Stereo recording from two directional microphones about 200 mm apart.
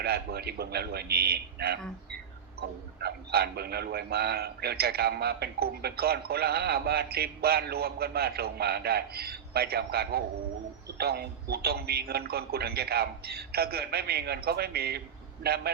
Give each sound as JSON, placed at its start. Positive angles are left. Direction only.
{"t": 0.0, "sound": "a man's voice", "side_deg": -50}